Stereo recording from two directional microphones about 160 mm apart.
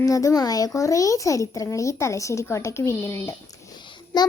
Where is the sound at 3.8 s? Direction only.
30° left (ahead or behind).